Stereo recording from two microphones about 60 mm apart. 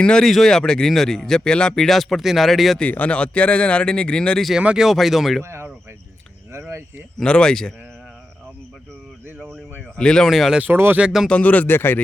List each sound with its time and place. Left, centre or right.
0.0 s speech: centre
2.9 s speech: left
4.8 s speech: centre
5.4 s a sound: right
7.2 s speech: centre
10.0 s speech: centre
10.2 s speech: centre
10.6 s speech: right
11.3 s speech: left